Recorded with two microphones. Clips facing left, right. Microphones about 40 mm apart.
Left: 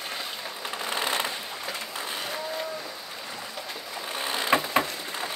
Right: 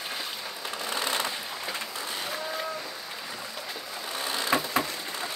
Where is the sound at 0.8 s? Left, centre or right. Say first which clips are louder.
Left 2 dB; left.